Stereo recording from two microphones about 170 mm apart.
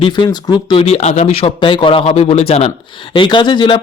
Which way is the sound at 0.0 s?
25° left (ahead or behind).